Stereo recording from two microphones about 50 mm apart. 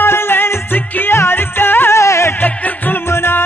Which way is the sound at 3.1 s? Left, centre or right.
Left.